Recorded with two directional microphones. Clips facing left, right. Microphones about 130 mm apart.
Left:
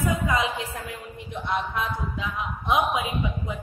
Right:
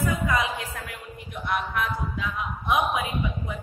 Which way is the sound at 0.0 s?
25° left (ahead or behind).